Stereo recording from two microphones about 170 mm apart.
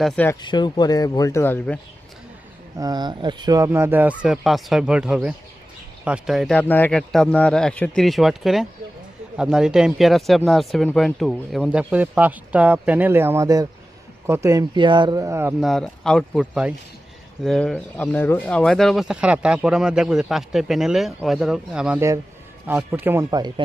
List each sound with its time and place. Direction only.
0.0 s speech: 10° left (ahead or behind)
0.4 s speech: 25° left (ahead or behind); by 1.8 s 10° left (ahead or behind)
2.7 s speech: 25° right (ahead or behind); by 6.6 s centre (ahead or behind)
6.6 s speech: 10° left (ahead or behind); by 15.5 s 15° right (ahead or behind)
15.6 s speech: centre (ahead or behind)
23.3 s speech: 25° right (ahead or behind)